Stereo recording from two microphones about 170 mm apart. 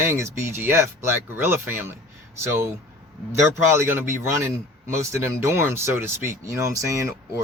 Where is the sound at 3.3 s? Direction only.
15° right (ahead or behind).